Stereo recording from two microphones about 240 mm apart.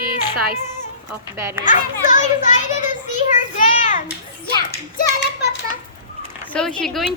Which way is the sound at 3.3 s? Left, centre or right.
Left.